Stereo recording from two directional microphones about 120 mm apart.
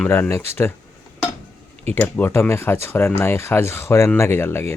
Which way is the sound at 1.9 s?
15° left (ahead or behind).